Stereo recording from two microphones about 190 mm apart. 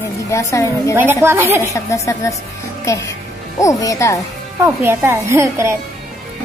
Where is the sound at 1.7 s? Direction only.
15° left (ahead or behind).